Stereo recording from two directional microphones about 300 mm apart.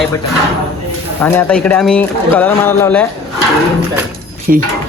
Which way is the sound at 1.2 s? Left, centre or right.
Centre.